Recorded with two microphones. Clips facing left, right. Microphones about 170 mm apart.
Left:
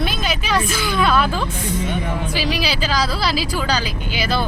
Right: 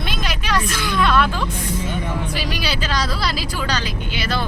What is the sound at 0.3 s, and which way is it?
Vehicle, 5° left (ahead or behind).